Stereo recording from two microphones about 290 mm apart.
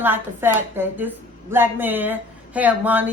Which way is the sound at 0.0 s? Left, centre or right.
Centre.